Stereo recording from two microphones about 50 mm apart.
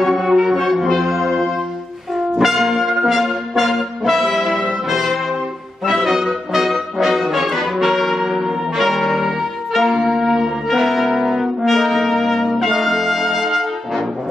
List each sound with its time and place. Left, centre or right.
0.0 s brass instrument: centre